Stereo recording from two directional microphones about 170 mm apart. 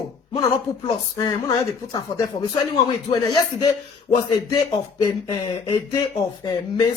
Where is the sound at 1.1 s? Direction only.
25° left (ahead or behind).